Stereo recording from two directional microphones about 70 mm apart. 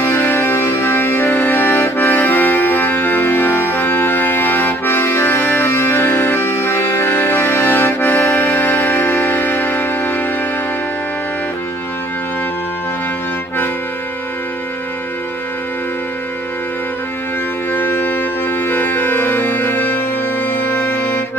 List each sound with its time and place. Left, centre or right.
0.0 s music: left
17.7 s music: left